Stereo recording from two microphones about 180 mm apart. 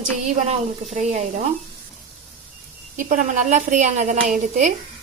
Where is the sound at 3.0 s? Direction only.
45° right (ahead or behind).